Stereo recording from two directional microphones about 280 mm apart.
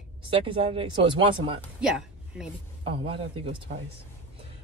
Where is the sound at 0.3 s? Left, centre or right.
Centre.